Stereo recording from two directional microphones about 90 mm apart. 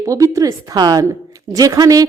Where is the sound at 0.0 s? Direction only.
40° right (ahead or behind).